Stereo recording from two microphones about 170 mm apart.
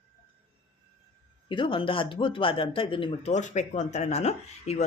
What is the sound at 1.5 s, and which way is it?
Speech, 30° left (ahead or behind).